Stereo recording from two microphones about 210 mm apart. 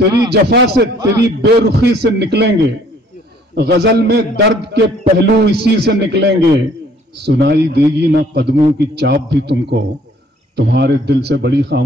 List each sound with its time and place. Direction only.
0.3 s a man's voice: 50° right (ahead or behind)
3.5 s a man's voice: 50° right (ahead or behind)